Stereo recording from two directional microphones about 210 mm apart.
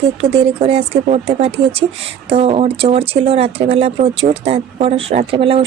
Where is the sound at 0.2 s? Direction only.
30° right (ahead or behind).